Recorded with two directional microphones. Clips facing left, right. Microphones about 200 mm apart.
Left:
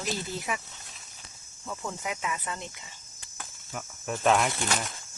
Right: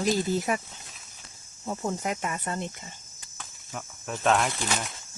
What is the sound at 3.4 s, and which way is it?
Cricket, 5° left (ahead or behind).